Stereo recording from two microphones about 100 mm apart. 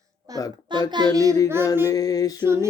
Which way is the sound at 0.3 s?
40° right (ahead or behind).